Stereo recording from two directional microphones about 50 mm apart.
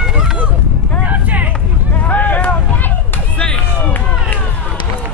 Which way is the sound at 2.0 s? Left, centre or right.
Left.